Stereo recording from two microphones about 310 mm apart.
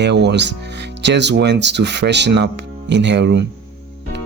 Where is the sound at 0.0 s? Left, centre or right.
Right.